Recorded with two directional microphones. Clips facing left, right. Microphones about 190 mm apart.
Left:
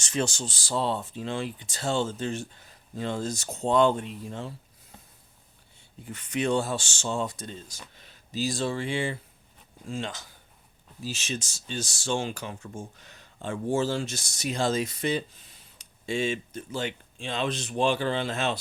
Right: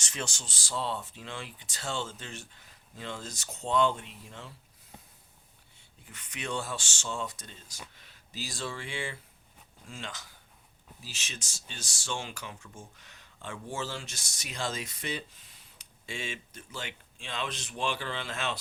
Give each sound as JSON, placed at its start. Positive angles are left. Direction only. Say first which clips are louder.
{"t": 0.0, "sound": "speech", "louder": "left 10 dB", "side_deg": 30}
{"t": 6.1, "sound": "speech", "louder": "left 11 dB", "side_deg": 35}
{"t": 11.0, "sound": "speech", "louder": "left 13 dB", "side_deg": 40}
{"t": 11.3, "sound": "speech", "louder": "left 12 dB", "side_deg": 25}